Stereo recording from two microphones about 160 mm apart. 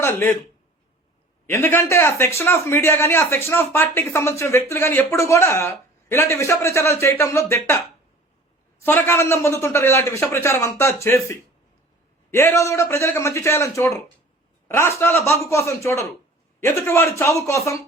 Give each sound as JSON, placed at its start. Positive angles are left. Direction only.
{"t": 0.0, "sound": "speech", "side_deg": 15}
{"t": 1.5, "sound": "a man's voice", "side_deg": 15}
{"t": 8.8, "sound": "a man's voice", "side_deg": 15}